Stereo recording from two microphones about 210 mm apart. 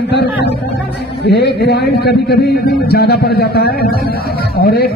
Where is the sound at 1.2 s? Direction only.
50° left (ahead or behind).